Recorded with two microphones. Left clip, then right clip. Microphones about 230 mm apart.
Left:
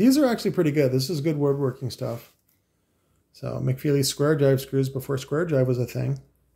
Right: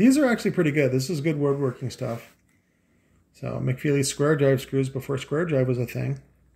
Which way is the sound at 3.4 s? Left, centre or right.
Centre.